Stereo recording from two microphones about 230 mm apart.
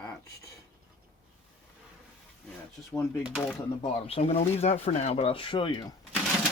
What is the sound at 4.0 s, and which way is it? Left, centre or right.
Speech, left.